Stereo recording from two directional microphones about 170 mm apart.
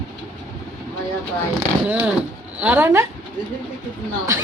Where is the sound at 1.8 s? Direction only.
10° right (ahead or behind).